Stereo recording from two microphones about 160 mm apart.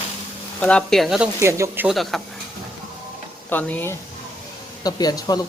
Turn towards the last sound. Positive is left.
turn(degrees=25)  # may be behind; listen again after turning